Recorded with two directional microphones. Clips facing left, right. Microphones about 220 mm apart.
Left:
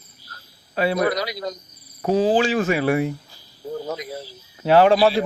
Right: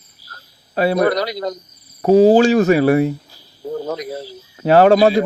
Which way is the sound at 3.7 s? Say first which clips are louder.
Right 5 dB; 55° right (ahead or behind).